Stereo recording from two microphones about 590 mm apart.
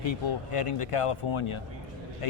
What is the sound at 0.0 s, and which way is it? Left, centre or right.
Speech, left.